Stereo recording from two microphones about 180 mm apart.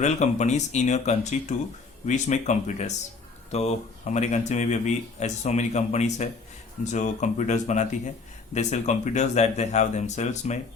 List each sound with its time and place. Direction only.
0.0 s speech: 40° left (ahead or behind)